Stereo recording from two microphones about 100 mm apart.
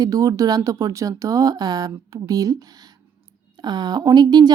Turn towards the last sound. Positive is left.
turn(degrees=-45)  # may be behind; listen again after turning